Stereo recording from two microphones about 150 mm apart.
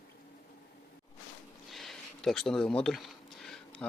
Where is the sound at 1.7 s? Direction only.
Centre (ahead or behind).